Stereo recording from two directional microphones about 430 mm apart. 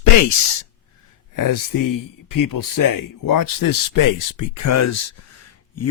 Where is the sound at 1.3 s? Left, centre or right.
Left.